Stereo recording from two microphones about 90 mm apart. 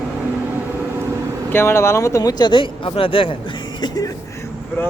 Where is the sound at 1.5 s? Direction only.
30° left (ahead or behind).